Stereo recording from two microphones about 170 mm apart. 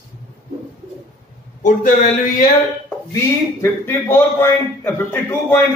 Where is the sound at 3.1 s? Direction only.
15° left (ahead or behind).